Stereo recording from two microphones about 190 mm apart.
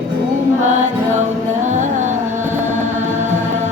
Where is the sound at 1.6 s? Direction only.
40° right (ahead or behind).